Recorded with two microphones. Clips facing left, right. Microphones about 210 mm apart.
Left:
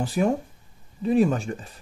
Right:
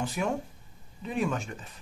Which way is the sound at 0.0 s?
35° left (ahead or behind).